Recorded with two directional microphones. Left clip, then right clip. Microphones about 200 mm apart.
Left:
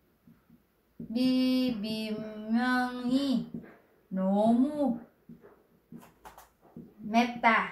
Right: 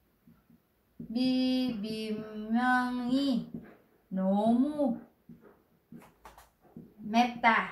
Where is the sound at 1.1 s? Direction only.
15° left (ahead or behind).